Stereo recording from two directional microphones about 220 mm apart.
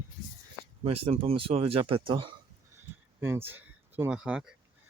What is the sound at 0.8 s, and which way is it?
Speech, 25° right (ahead or behind).